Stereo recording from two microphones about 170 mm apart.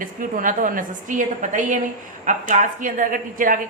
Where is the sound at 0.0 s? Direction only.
55° right (ahead or behind).